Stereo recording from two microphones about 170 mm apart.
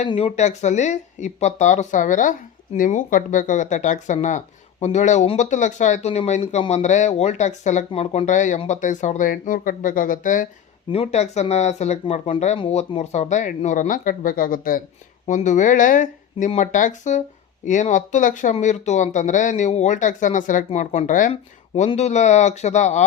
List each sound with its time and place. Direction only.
0.1 s speech: 35° left (ahead or behind)
10.9 s speech: 35° left (ahead or behind)